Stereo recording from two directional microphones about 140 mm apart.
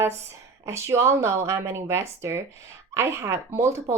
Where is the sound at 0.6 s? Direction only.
20° right (ahead or behind).